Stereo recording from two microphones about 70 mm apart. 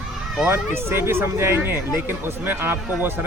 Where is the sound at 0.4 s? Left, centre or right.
Right.